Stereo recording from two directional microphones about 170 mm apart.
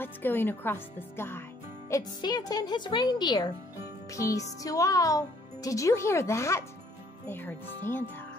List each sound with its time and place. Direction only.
0.0 s speech: 10° left (ahead or behind)